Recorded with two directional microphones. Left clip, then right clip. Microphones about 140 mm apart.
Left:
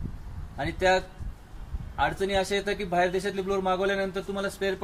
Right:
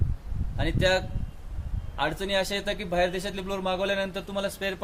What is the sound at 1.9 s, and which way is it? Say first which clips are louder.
A man's voice: left 1 dB; 30° right (ahead or behind).